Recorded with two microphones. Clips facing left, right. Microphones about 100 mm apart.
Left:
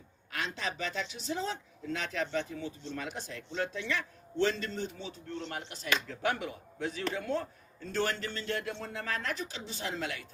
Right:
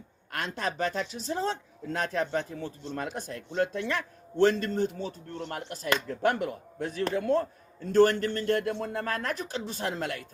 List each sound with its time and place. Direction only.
0.3 s speech: 50° right (ahead or behind)